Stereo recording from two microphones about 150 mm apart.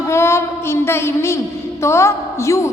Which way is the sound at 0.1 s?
15° left (ahead or behind).